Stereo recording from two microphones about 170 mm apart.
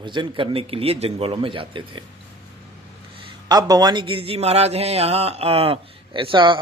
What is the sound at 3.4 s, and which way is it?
A man's voice, 20° right (ahead or behind).